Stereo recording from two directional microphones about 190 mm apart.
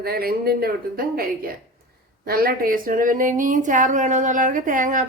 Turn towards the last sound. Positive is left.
turn(degrees=-45)  # may be behind; listen again after turning